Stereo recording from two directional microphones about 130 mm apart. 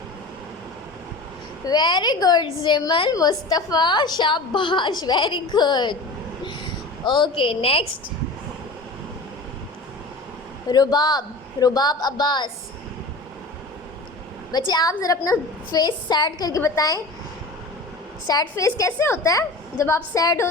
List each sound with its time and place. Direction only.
1.6 s a woman's voice: 35° left (ahead or behind)
7.0 s a woman's voice: 35° left (ahead or behind)
10.7 s a woman's voice: 30° left (ahead or behind)
14.5 s a woman's voice: 30° left (ahead or behind)
18.3 s a woman's voice: 25° left (ahead or behind)